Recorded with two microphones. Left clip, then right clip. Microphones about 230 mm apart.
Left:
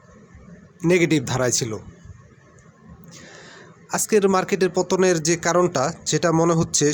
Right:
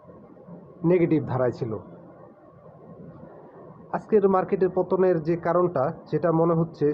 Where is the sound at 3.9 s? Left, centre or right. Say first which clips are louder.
Left 2 dB; left.